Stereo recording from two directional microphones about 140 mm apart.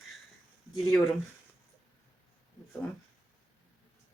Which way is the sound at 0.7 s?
20° left (ahead or behind).